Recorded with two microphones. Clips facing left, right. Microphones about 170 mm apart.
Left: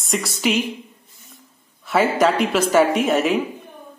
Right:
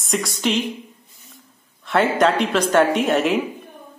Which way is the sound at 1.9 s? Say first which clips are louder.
Even; 5° left (ahead or behind).